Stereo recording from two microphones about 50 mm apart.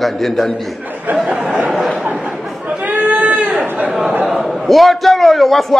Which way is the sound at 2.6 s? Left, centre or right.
Right.